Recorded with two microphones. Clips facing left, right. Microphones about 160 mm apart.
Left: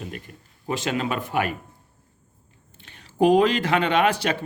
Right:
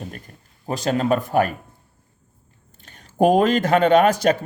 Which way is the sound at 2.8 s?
45° right (ahead or behind).